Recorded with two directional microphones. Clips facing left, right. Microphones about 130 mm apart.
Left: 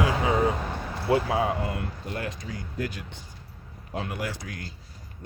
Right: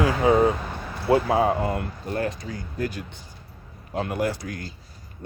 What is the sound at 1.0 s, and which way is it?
Speech, 40° right (ahead or behind).